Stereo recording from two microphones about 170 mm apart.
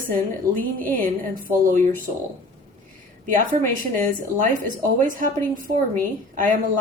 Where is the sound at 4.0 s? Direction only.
50° right (ahead or behind).